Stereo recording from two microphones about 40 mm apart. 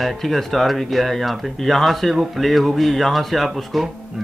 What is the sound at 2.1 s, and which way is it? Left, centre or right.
Speech, centre.